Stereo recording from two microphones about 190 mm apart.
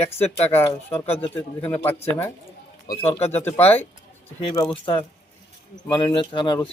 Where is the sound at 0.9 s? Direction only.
30° left (ahead or behind).